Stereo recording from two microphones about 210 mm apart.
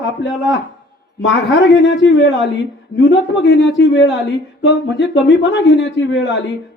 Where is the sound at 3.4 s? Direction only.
60° left (ahead or behind).